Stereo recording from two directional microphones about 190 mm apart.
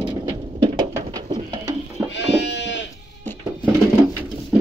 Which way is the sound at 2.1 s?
65° left (ahead or behind).